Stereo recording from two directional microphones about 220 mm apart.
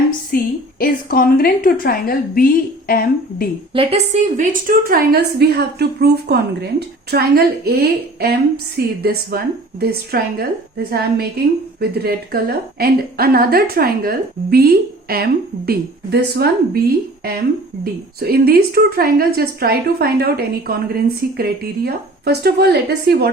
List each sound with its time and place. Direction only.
0.8 s a woman's voice: 40° left (ahead or behind)
3.7 s a woman's voice: 25° right (ahead or behind); by 16.8 s 45° right (ahead or behind)
18.2 s a woman's voice: 45° right (ahead or behind)